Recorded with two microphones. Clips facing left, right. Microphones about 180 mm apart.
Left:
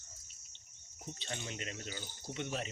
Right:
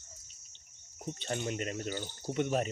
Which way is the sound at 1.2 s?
55° right (ahead or behind).